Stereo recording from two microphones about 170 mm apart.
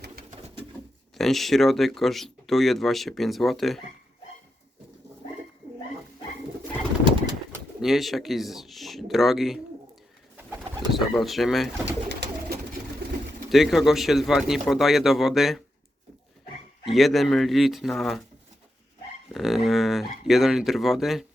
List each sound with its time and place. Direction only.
0.3 s bird: 35° right (ahead or behind)
1.1 s speech: centre (ahead or behind)
7.0 s pigeon: 30° right (ahead or behind)
7.8 s speech: centre (ahead or behind)
10.9 s speech: centre (ahead or behind)
12.0 s bird: 80° right
13.5 s speech: centre (ahead or behind)
16.8 s speech: centre (ahead or behind)
19.3 s speech: centre (ahead or behind)